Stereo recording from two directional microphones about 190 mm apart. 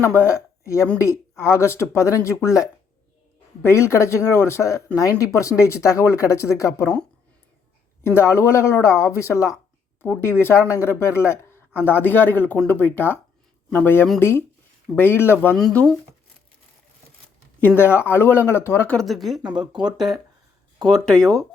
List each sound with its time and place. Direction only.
0.1 s speech: 10° left (ahead or behind)
8.0 s speech: 15° left (ahead or behind)
17.7 s speech: 10° left (ahead or behind)
19.8 s speech: 20° right (ahead or behind)
20.8 s speech: centre (ahead or behind)